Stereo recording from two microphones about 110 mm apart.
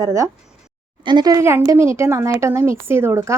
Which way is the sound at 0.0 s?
30° right (ahead or behind).